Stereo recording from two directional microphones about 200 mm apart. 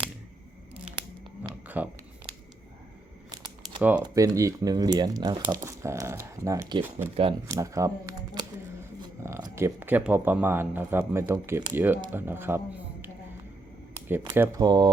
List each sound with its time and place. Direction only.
1.6 s a sound: 10° right (ahead or behind)
3.3 s crumpling: 20° right (ahead or behind)
4.0 s a man's voice: 20° right (ahead or behind)
14.1 s speech: 10° right (ahead or behind)